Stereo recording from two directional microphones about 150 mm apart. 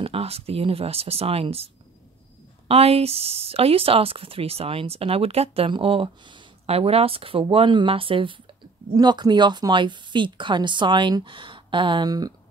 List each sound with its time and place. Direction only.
0.0 s speech: 40° right (ahead or behind)
2.7 s speech: 40° right (ahead or behind); by 12.4 s 25° right (ahead or behind)